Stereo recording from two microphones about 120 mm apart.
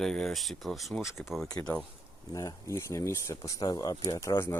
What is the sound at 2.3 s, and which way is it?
Speech, 30° left (ahead or behind).